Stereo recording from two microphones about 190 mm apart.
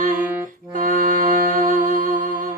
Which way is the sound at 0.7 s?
45° right (ahead or behind).